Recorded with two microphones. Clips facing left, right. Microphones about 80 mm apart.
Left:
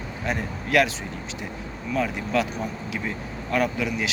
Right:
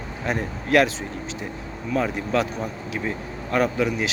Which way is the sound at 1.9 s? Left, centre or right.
Right.